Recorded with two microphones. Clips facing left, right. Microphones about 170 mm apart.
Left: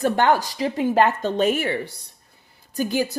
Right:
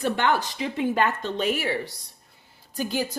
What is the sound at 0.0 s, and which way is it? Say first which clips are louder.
Speech: left 5 dB; 45° left (ahead or behind).